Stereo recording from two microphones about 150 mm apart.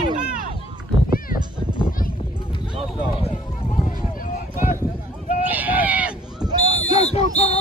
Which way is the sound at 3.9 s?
65° left (ahead or behind).